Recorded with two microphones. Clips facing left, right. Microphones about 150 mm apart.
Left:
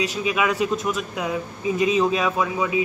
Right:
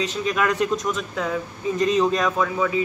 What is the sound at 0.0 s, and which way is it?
A man's voice, 10° left (ahead or behind).